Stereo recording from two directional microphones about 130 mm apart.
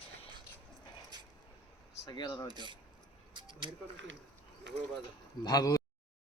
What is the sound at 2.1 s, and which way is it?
Speech, 35° left (ahead or behind).